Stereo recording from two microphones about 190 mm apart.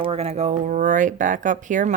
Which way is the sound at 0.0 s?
30° right (ahead or behind).